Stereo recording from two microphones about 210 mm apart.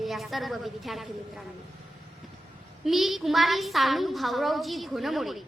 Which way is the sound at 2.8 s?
Centre (ahead or behind).